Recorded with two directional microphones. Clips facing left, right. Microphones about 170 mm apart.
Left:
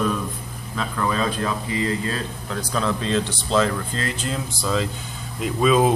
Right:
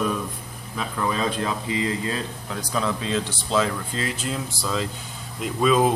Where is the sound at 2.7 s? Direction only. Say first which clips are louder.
Left 2 dB; 10° right (ahead or behind).